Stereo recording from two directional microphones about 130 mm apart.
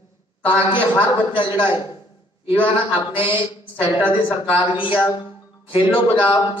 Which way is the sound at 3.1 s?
40° left (ahead or behind).